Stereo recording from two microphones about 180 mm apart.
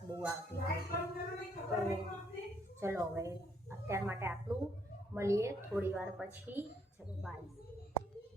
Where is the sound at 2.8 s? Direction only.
15° right (ahead or behind).